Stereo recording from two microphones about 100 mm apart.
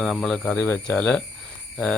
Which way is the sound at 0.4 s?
20° left (ahead or behind).